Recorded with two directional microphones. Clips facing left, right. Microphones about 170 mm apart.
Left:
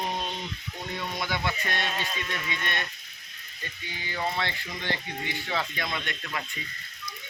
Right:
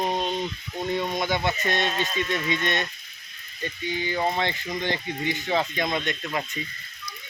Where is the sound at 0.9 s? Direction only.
20° right (ahead or behind).